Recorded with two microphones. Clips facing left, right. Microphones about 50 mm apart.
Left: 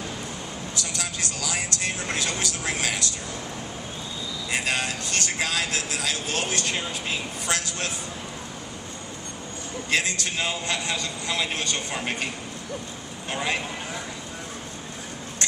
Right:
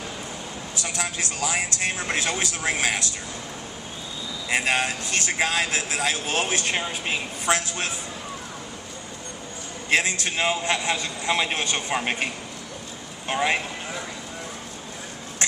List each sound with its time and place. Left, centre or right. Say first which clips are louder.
0.8 s a man's voice: right 4 dB; right
4.4 s a man's voice: right 4 dB; right
9.9 s a man's voice: right 3 dB; right